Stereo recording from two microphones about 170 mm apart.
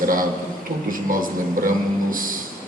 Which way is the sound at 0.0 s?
55° right (ahead or behind).